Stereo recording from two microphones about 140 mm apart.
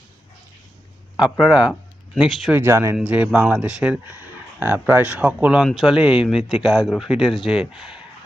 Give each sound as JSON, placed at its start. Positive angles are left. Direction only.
{"t": 1.2, "sound": "speech", "side_deg": -5}
{"t": 2.5, "sound": "speech", "side_deg": -15}
{"t": 2.9, "sound": "speech", "side_deg": -10}